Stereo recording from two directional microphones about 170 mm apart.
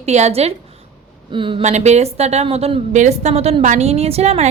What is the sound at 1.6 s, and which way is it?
A woman's voice, 40° right (ahead or behind).